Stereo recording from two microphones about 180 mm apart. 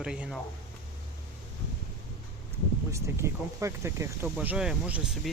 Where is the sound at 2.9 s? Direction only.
15° right (ahead or behind).